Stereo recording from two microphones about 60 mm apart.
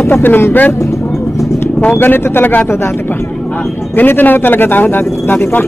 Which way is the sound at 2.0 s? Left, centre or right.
Left.